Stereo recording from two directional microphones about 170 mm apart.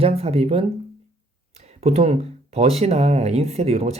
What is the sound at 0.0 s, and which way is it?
Speech, 35° right (ahead or behind).